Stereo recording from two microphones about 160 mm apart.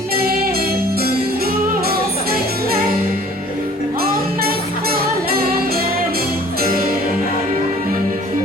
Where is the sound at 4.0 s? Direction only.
70° right (ahead or behind).